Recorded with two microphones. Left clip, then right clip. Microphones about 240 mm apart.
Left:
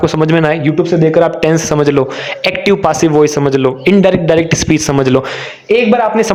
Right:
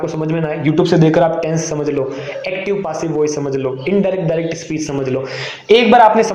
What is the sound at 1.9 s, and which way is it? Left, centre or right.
A man's voice, left.